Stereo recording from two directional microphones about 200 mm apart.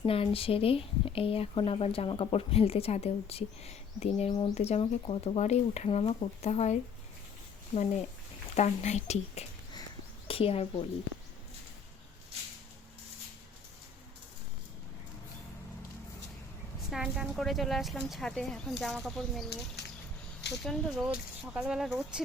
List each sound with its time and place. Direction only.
0.0 s speech: 30° left (ahead or behind)
8.5 s a woman's voice: 35° left (ahead or behind)
16.9 s speech: 5° right (ahead or behind)
19.8 s a sound: 55° left (ahead or behind)
20.6 s speech: centre (ahead or behind)